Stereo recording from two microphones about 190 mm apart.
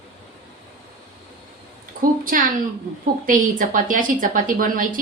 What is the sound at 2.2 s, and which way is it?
A woman's voice, 45° right (ahead or behind).